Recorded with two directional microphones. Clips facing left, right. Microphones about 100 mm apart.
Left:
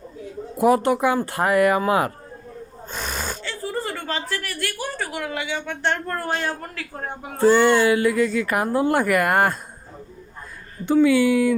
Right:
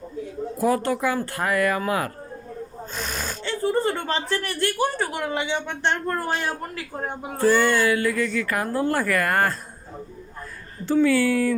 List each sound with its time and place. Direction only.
0.6 s a woman's voice: 20° left (ahead or behind)
2.9 s gasp: centre (ahead or behind)
3.4 s a woman's voice: 25° right (ahead or behind)
7.3 s a woman's voice: 20° left (ahead or behind)
10.8 s speech: 15° left (ahead or behind)